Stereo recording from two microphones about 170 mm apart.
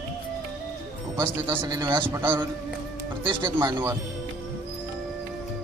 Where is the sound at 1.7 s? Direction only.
25° right (ahead or behind).